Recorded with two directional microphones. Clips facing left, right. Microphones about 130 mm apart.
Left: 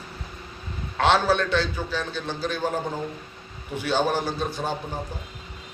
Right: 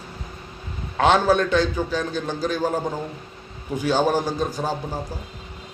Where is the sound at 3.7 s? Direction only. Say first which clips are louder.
Right 4 dB; 40° right (ahead or behind).